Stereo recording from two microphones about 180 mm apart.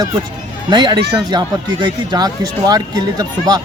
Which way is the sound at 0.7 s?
25° right (ahead or behind).